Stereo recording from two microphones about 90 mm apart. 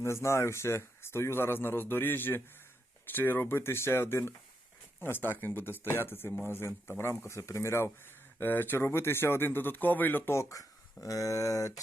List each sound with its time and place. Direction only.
0.0 s speech: 30° left (ahead or behind)
11.0 s speech: 40° left (ahead or behind)